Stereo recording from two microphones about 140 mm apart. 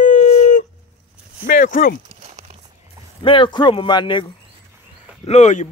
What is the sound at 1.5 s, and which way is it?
Speech, 80° left.